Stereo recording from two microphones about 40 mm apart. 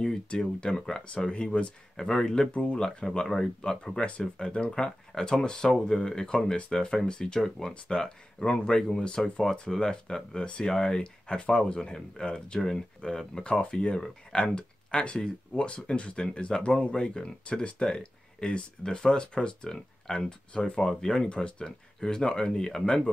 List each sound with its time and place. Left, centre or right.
0.3 s speech: left
2.0 s speech: centre
2.5 s speech: left
2.8 s speech: centre
7.4 s speech: centre
7.7 s speech: centre